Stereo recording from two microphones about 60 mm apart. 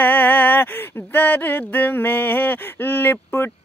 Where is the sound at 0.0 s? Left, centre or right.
Left.